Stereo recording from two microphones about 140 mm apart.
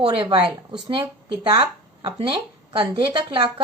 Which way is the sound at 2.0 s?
40° right (ahead or behind).